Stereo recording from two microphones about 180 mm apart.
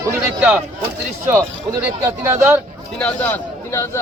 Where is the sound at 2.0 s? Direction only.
15° right (ahead or behind).